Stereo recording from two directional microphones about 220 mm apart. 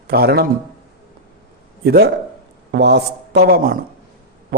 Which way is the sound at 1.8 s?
45° right (ahead or behind).